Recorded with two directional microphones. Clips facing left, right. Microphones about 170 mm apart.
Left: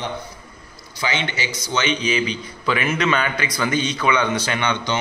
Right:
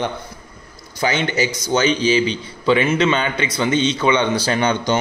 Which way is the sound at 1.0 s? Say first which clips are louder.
Right 6 dB; 45° right (ahead or behind).